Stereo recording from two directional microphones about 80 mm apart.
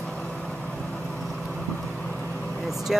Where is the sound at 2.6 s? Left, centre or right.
Centre.